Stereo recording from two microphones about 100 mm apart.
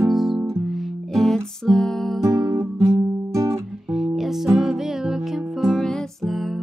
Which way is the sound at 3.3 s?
30° right (ahead or behind).